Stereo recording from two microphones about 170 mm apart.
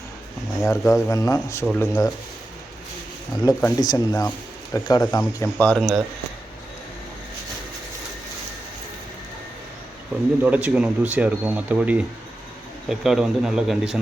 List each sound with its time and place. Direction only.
0.6 s speech: 15° left (ahead or behind)
3.4 s speech: 20° left (ahead or behind)
5.5 s a man's voice: 5° left (ahead or behind)
10.4 s a man's voice: 10° right (ahead or behind)